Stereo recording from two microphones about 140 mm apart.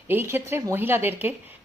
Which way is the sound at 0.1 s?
15° right (ahead or behind).